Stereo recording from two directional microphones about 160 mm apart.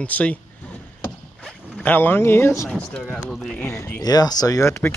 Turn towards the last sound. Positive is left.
turn(degrees=15)  # may be behind; listen again after turning